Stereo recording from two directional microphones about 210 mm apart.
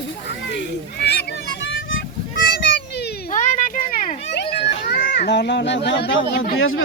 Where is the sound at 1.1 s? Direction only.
50° left (ahead or behind).